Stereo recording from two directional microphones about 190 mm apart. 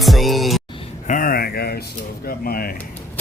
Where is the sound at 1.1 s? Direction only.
50° left (ahead or behind).